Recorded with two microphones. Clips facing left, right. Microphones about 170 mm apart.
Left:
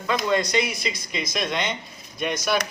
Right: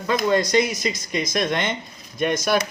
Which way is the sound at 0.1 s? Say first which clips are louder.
Right 3 dB; 40° right (ahead or behind).